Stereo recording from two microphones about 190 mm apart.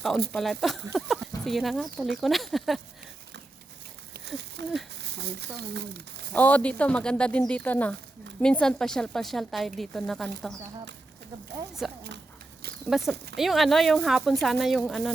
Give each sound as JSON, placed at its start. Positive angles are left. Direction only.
{"t": 0.3, "sound": "a woman's voice", "side_deg": 0}
{"t": 4.6, "sound": "speech", "side_deg": -65}
{"t": 6.3, "sound": "a woman's voice", "side_deg": 10}
{"t": 11.8, "sound": "a woman's voice", "side_deg": 0}